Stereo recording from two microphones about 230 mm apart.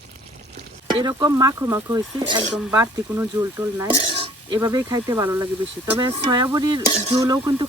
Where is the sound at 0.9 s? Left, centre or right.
Centre.